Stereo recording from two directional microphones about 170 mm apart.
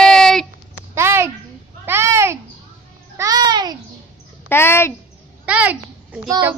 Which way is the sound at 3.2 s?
20° right (ahead or behind).